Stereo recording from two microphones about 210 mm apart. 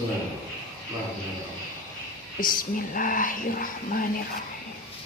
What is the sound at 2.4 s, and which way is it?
A woman's voice, 40° left (ahead or behind).